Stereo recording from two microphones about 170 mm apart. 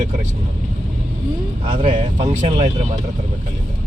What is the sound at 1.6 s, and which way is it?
Speech, 30° right (ahead or behind).